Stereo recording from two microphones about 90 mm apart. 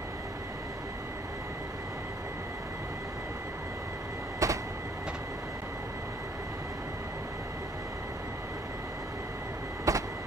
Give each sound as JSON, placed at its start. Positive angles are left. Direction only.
{"t": 4.4, "sound": "train", "side_deg": -35}
{"t": 9.9, "sound": "vehicle", "side_deg": -40}